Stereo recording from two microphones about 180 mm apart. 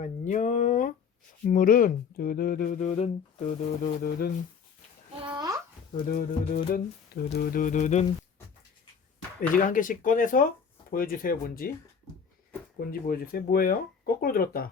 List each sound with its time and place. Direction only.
0.0 s a sound: 45° left (ahead or behind)
1.5 s speech: 50° left (ahead or behind)
5.2 s a sound: 25° right (ahead or behind)
6.1 s speech: 50° left (ahead or behind)
9.6 s speech: 50° left (ahead or behind)
12.8 s speech: 55° left (ahead or behind)